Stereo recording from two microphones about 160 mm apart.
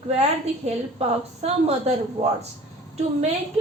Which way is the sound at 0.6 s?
40° right (ahead or behind).